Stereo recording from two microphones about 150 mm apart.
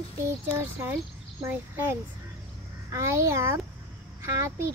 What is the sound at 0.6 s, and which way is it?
Speech, 15° right (ahead or behind).